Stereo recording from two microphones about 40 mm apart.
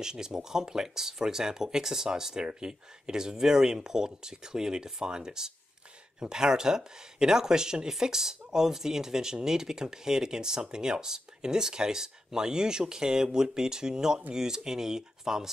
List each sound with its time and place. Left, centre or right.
0.0 s speech: centre